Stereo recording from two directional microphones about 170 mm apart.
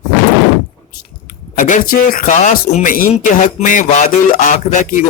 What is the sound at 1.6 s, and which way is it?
A man's voice, 50° left (ahead or behind).